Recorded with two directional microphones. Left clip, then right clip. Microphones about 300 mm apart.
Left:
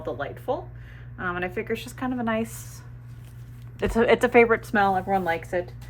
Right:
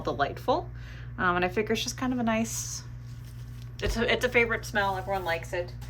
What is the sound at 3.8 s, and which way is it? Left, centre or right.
Speech, centre.